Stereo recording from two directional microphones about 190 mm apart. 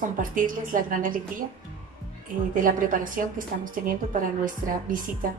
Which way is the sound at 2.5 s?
45° right (ahead or behind).